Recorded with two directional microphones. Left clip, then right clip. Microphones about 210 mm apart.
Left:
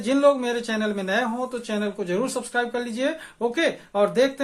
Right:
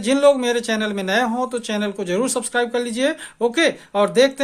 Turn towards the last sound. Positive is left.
turn(degrees=-40)  # may be behind; listen again after turning